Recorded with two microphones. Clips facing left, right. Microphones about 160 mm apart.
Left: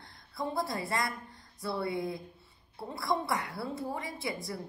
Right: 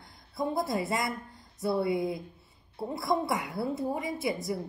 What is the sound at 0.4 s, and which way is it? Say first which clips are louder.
A woman's voice: right 4 dB; 20° right (ahead or behind).